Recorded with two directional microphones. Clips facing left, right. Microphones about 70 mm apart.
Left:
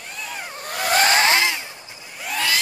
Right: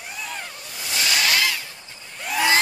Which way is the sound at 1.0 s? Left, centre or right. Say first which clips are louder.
Even; left.